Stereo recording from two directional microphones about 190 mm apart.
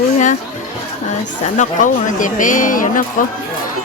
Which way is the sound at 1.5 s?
40° left (ahead or behind).